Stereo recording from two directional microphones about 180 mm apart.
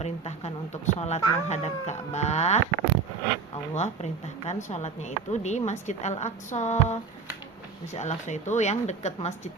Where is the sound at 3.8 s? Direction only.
40° left (ahead or behind).